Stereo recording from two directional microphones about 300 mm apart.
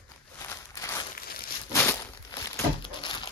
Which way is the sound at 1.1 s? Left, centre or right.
Left.